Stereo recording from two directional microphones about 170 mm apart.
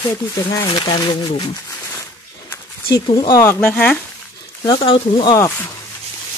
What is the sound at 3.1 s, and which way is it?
Speech, 25° left (ahead or behind).